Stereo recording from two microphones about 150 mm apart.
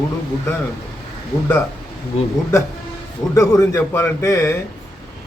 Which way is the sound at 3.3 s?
20° left (ahead or behind).